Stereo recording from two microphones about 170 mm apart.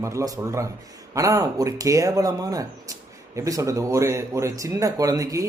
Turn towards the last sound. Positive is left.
turn(degrees=-20)  # may be behind; listen again after turning